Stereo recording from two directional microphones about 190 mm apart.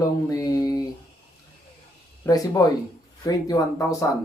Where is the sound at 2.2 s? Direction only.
20° left (ahead or behind).